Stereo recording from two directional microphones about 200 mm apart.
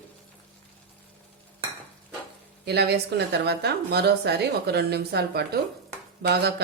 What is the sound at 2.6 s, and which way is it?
Speech, 55° right (ahead or behind).